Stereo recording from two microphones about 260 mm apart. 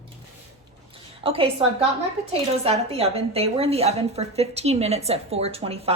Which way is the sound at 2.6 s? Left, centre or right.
Right.